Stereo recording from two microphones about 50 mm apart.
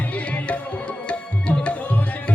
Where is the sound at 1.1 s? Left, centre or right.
Left.